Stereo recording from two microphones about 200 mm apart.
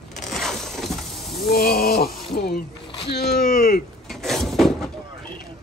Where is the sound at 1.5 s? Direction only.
50° left (ahead or behind).